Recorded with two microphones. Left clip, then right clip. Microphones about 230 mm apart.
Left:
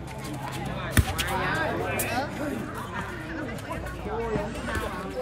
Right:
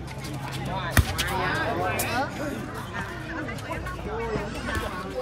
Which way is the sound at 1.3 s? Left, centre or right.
Left.